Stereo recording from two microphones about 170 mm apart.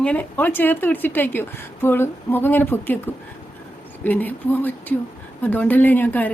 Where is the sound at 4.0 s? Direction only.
10° left (ahead or behind).